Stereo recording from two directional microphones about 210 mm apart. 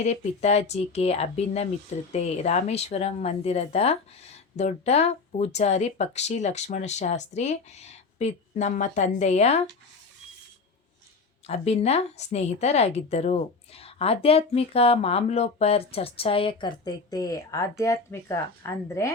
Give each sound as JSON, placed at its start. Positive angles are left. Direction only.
{"t": 0.0, "sound": "speech", "side_deg": 30}
{"t": 11.4, "sound": "a woman's voice", "side_deg": 30}